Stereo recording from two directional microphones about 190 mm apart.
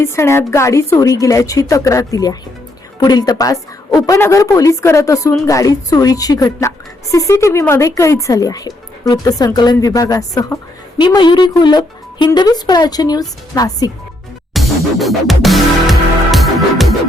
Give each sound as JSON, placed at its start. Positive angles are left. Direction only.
{"t": 0.0, "sound": "a woman's voice", "side_deg": 15}
{"t": 14.5, "sound": "music", "side_deg": 0}